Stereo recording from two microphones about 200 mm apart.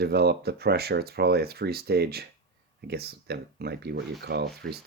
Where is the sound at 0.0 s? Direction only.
50° right (ahead or behind).